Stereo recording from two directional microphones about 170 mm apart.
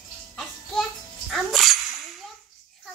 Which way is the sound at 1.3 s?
Centre (ahead or behind).